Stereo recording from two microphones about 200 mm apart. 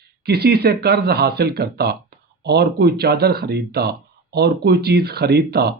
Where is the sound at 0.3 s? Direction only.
50° right (ahead or behind).